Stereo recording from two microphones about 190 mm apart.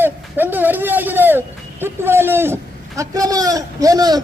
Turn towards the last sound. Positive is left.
turn(degrees=-20)  # may be behind; listen again after turning